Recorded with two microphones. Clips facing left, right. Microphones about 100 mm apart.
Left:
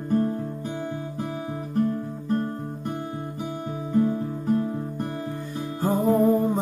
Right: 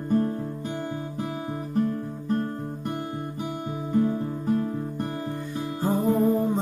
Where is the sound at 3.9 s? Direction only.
Centre (ahead or behind).